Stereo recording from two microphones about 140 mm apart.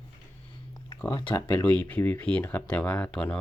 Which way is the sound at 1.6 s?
10° left (ahead or behind).